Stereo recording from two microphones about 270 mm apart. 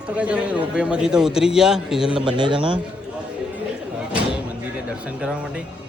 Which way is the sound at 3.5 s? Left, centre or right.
Centre.